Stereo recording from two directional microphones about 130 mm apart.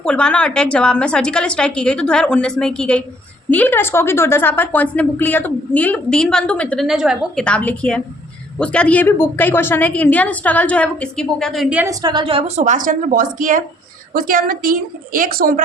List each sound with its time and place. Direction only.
0.0 s a woman's voice: 5° left (ahead or behind)
6.8 s a woman's voice: 5° right (ahead or behind)
7.4 s a woman's voice: 10° left (ahead or behind)
11.9 s a woman's voice: 35° right (ahead or behind); by 15.6 s 90° right